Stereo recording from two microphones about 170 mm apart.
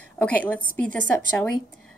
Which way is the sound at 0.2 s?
5° left (ahead or behind).